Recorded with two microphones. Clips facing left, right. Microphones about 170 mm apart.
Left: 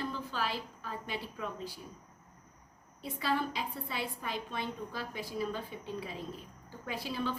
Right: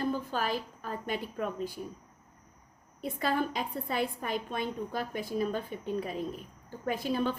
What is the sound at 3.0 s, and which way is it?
A woman's voice, 50° right (ahead or behind).